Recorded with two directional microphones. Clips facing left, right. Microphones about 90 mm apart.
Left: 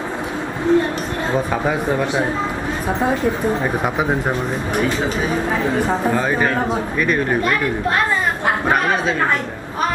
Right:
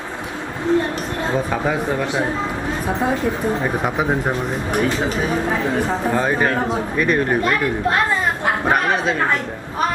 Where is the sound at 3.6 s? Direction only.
5° left (ahead or behind).